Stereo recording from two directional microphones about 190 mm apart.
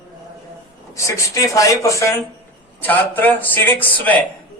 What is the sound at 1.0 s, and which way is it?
Speech, 15° left (ahead or behind).